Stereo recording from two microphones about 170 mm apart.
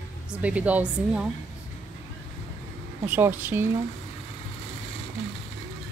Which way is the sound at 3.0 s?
10° right (ahead or behind).